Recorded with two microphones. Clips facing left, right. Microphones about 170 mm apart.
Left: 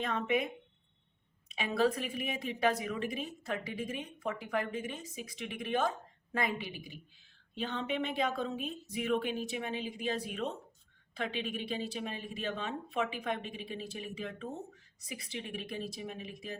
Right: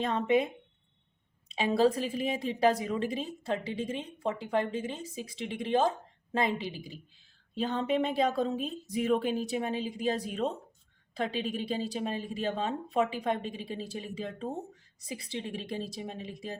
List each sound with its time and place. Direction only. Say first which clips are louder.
0.0 s a woman's voice: right 5 dB; 30° right (ahead or behind)